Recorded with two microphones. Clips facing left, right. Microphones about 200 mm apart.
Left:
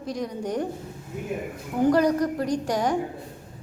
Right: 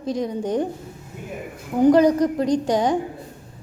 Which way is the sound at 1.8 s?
20° right (ahead or behind).